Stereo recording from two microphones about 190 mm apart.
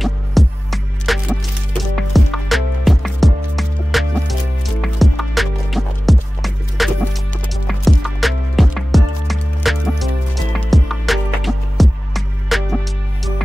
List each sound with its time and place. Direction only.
0.0 s music: centre (ahead or behind)